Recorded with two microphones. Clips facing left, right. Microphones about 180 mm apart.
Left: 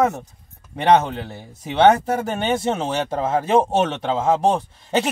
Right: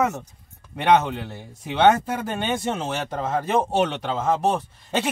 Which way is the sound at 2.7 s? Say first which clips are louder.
Left 4 dB; 30° left (ahead or behind).